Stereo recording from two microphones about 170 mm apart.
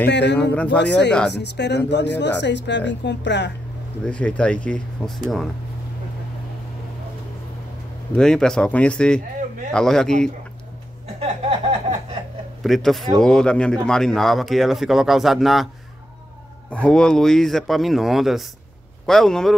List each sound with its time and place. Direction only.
0.0 s speech: 85° left
0.4 s speech: 10° left (ahead or behind)
0.8 s speech: 90° left
4.0 s speech: 5° left (ahead or behind)
8.1 s speech: 5° left (ahead or behind)
12.6 s speech: centre (ahead or behind)
16.7 s speech: 5° left (ahead or behind)